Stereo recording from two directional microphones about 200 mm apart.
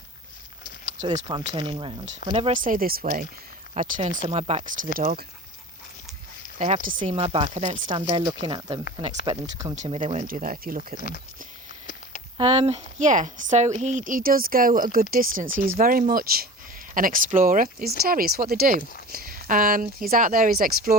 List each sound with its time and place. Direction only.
1.5 s speech: 25° right (ahead or behind)
2.5 s speech: 45° right (ahead or behind)
4.2 s speech: 30° right (ahead or behind); by 5.2 s 45° right (ahead or behind)
7.0 s speech: 30° right (ahead or behind)
7.9 s speech: 20° right (ahead or behind)
9.7 s speech: 35° right (ahead or behind)
12.4 s speech: 30° right (ahead or behind); by 20.9 s 45° right (ahead or behind)